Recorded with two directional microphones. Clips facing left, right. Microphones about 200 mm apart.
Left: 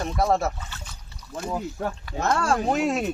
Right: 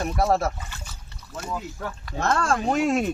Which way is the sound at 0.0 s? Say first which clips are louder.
Even; 5° right (ahead or behind).